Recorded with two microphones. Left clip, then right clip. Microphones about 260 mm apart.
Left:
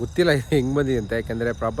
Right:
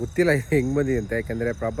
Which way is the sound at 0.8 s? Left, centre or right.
Centre.